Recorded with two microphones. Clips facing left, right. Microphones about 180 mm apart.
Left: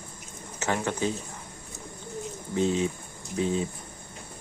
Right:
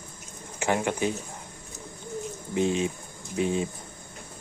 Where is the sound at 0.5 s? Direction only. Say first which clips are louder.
Right 2 dB; 10° right (ahead or behind).